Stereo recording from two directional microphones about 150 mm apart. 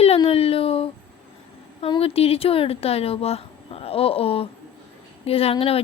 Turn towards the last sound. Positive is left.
turn(degrees=40)  # may be behind; listen again after turning